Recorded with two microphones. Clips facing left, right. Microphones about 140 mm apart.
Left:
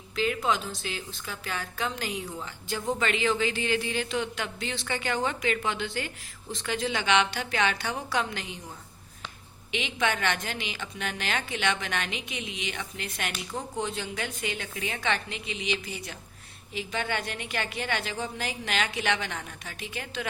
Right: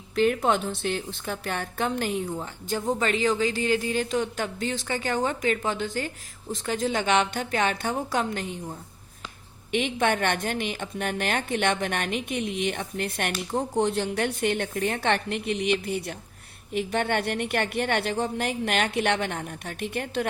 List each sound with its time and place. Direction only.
0.2 s a woman's voice: 55° right (ahead or behind)
9.7 s a woman's voice: 50° right (ahead or behind)
13.5 s speech: 35° right (ahead or behind)
13.8 s a woman's voice: 65° right (ahead or behind)